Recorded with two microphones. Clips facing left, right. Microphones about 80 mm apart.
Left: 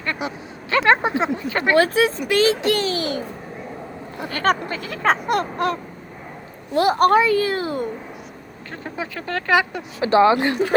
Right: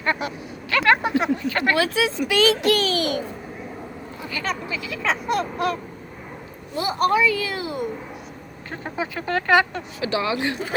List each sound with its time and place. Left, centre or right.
0.2 s vehicle: left
1.7 s a child's voice: left
4.2 s speech: left
6.7 s speech: left
8.7 s speech: centre
10.0 s speech: left